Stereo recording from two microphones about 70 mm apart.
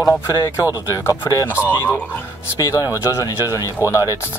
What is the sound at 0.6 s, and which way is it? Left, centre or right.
Speech, left.